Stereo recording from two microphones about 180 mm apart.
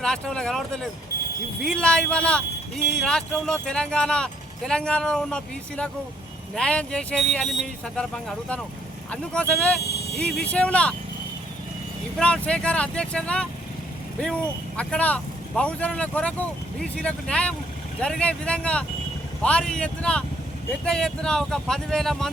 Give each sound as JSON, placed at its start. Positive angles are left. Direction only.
{"t": 0.0, "sound": "speech", "side_deg": 5}
{"t": 9.8, "sound": "a sound", "side_deg": 65}
{"t": 10.3, "sound": "speech", "side_deg": 5}
{"t": 12.1, "sound": "speech", "side_deg": 5}